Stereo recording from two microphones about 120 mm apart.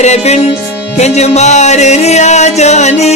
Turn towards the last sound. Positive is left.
turn(degrees=70)  # may be behind; listen again after turning